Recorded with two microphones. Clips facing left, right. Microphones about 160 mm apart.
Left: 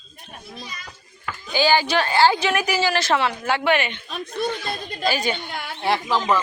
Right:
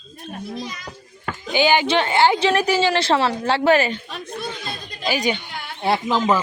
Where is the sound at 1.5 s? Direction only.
20° right (ahead or behind); by 4.0 s 35° right (ahead or behind).